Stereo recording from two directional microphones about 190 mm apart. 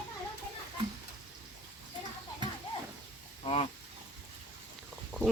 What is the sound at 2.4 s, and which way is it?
Horse, 25° right (ahead or behind).